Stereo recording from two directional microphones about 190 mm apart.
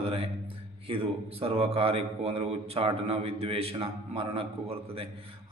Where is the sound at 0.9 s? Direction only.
30° right (ahead or behind).